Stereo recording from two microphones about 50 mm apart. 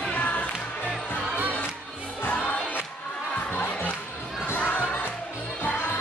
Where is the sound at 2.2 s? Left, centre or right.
Left.